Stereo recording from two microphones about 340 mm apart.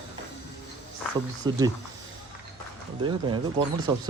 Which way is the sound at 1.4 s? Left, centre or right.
Centre.